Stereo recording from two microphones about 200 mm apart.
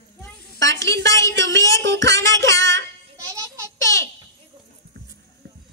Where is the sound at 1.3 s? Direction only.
65° right (ahead or behind).